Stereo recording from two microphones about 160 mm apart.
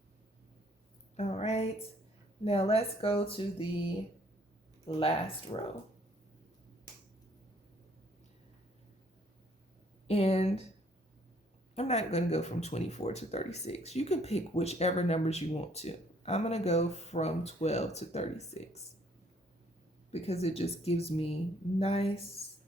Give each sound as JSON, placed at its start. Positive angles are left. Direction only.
{"t": 1.1, "sound": "a woman's voice", "side_deg": 40}
{"t": 4.9, "sound": "a woman's voice", "side_deg": 35}
{"t": 10.1, "sound": "speech", "side_deg": 40}
{"t": 11.7, "sound": "speech", "side_deg": 45}
{"t": 20.1, "sound": "a woman's voice", "side_deg": 40}